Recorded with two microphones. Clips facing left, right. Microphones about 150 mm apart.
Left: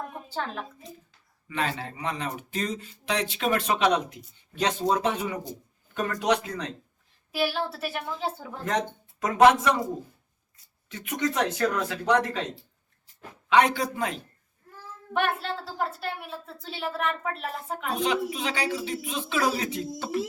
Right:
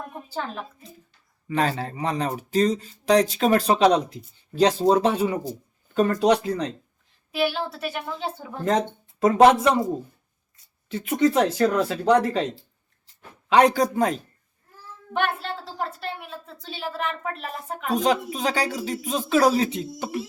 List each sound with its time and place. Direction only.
0.3 s a woman's voice: centre (ahead or behind)
1.5 s speech: 35° right (ahead or behind)
7.3 s a woman's voice: centre (ahead or behind)
9.2 s speech: 30° right (ahead or behind)
10.8 s speech: 30° right (ahead or behind)
13.5 s speech: 40° right (ahead or behind)
15.8 s a woman's voice: centre (ahead or behind)
17.9 s speech: 40° right (ahead or behind); by 20.1 s 15° right (ahead or behind)